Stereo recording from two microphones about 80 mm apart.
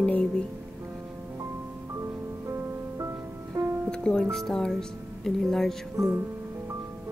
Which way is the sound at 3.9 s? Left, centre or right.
Centre.